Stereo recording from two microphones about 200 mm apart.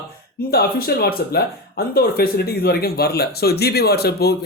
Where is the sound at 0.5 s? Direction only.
50° left (ahead or behind).